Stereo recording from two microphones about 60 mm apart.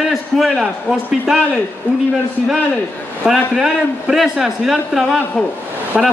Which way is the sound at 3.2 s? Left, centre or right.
Centre.